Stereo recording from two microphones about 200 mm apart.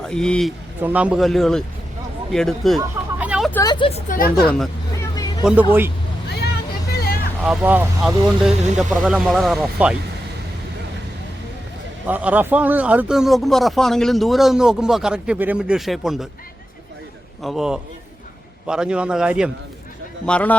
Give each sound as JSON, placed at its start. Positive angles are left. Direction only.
{"t": 0.0, "sound": "speech", "side_deg": 5}
{"t": 0.8, "sound": "speech", "side_deg": -10}
{"t": 2.3, "sound": "a sound", "side_deg": 0}
{"t": 3.5, "sound": "speech", "side_deg": 20}
{"t": 4.1, "sound": "speech", "side_deg": 45}
{"t": 4.4, "sound": "speech", "side_deg": 0}
{"t": 6.9, "sound": "vehicle", "side_deg": 50}
{"t": 7.4, "sound": "speech", "side_deg": -5}
{"t": 12.0, "sound": "speech", "side_deg": -10}
{"t": 17.4, "sound": "speech", "side_deg": 0}
{"t": 20.2, "sound": "a man's voice", "side_deg": 5}